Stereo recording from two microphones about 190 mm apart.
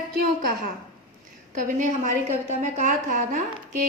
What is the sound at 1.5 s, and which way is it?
A woman's voice, 40° right (ahead or behind).